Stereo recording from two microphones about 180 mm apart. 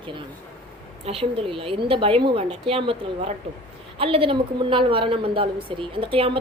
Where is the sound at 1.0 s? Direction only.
30° right (ahead or behind).